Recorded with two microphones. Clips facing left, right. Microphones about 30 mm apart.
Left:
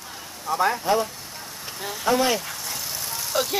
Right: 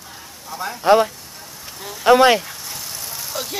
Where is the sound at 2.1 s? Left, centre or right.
Right.